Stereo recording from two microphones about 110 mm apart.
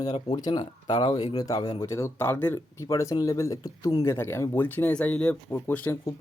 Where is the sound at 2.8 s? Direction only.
30° left (ahead or behind).